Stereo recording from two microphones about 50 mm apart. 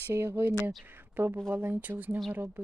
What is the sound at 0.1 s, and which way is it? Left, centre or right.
Speech, right.